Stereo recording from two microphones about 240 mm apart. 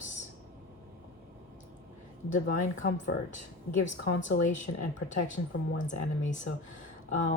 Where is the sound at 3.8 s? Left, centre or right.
Left.